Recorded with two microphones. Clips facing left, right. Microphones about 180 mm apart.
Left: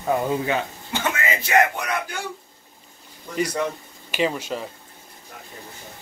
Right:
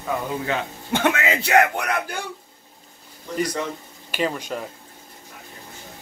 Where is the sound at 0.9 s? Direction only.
65° right (ahead or behind).